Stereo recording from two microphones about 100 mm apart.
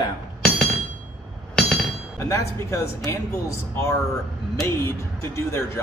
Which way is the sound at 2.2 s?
30° left (ahead or behind).